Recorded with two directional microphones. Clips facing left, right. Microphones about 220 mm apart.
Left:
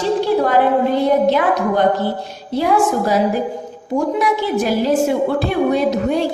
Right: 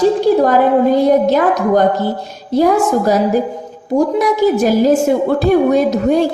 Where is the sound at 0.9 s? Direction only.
40° right (ahead or behind).